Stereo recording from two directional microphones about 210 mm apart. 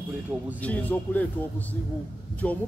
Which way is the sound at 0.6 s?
5° left (ahead or behind).